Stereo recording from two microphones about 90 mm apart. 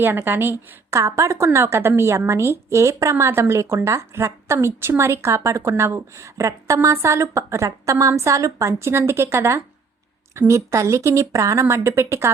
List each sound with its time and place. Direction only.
0.0 s a woman's voice: 25° right (ahead or behind)